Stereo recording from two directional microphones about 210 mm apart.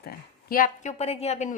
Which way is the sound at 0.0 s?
45° left (ahead or behind).